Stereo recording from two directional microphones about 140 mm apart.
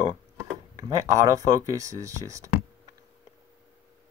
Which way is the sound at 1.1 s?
25° right (ahead or behind).